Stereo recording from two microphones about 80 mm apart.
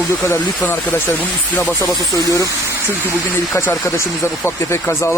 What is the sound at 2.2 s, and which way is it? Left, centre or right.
Speech, left.